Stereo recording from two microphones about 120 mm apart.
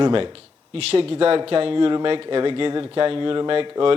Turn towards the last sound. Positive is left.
turn(degrees=-45)  # may be behind; listen again after turning